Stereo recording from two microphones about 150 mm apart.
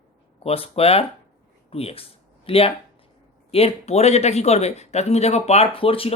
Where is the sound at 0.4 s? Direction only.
40° left (ahead or behind).